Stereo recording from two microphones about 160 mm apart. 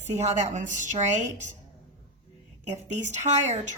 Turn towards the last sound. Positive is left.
turn(degrees=-45)  # may be behind; listen again after turning